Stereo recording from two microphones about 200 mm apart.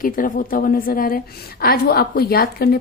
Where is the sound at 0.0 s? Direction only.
45° left (ahead or behind).